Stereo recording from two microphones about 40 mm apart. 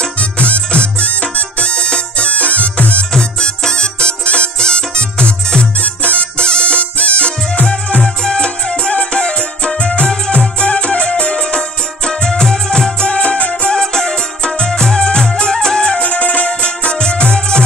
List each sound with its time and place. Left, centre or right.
0.2 s music: left
3.2 s music: centre
12.1 s music: centre
13.7 s music: centre
16.0 s music: left